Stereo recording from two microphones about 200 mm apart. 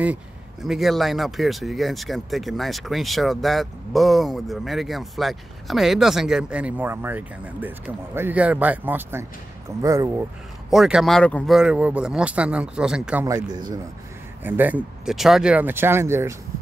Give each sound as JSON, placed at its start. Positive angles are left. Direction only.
{"t": 0.0, "sound": "speech", "side_deg": -5}
{"t": 10.7, "sound": "speech", "side_deg": 0}
{"t": 13.5, "sound": "speech", "side_deg": -20}
{"t": 14.4, "sound": "speech", "side_deg": -10}